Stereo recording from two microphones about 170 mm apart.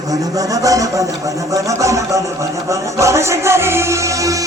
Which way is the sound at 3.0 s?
15° right (ahead or behind).